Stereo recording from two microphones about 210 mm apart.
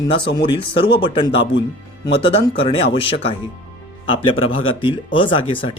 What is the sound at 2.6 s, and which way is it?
Speech, 30° left (ahead or behind).